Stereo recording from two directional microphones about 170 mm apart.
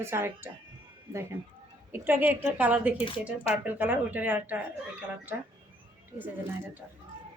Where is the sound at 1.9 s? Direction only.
10° right (ahead or behind).